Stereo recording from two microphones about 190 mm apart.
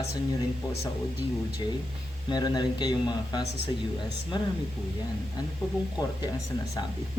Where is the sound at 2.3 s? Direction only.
20° left (ahead or behind).